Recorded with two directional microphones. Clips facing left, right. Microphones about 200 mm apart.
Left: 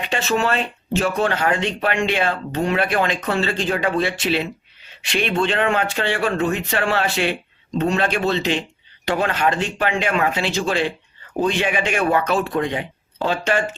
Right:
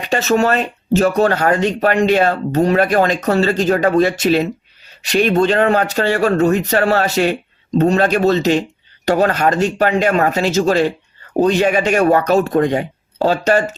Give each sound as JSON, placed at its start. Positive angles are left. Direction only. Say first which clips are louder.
{"t": 0.0, "sound": "speech", "louder": "right 6 dB", "side_deg": -40}